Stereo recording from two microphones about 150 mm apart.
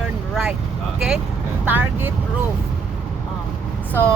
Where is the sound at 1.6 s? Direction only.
15° right (ahead or behind).